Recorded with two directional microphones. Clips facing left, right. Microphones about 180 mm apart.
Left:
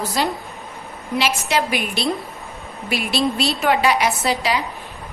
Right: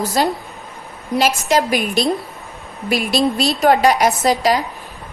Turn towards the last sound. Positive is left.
turn(degrees=-45)  # may be behind; listen again after turning